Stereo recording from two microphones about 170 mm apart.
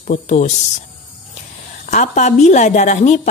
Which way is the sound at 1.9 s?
45° left (ahead or behind).